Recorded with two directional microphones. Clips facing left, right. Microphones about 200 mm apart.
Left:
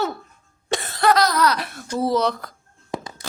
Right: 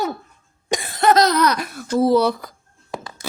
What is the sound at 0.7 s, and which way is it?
Cough, 15° right (ahead or behind).